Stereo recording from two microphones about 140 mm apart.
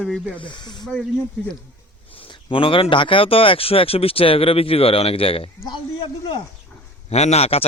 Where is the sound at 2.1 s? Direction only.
40° left (ahead or behind).